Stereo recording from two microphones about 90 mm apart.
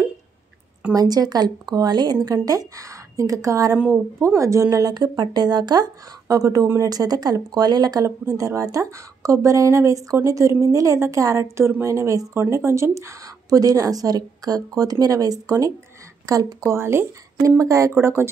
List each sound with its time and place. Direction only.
0.9 s speech: 45° right (ahead or behind)
16.7 s speech: 25° right (ahead or behind)
17.4 s speech: 40° right (ahead or behind)
17.9 s speech: 25° right (ahead or behind)